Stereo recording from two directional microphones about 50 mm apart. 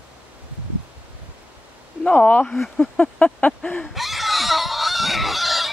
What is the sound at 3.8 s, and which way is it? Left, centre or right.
Fowl, centre.